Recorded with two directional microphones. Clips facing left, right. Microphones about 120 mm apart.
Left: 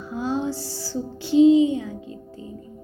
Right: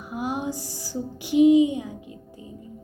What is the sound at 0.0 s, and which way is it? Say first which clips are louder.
Music: left 3 dB; 15° right (ahead or behind).